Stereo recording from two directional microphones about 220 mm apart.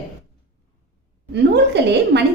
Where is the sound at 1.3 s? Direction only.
50° right (ahead or behind).